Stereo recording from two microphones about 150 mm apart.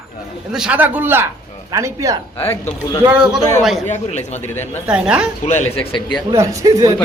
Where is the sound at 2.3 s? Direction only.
15° left (ahead or behind).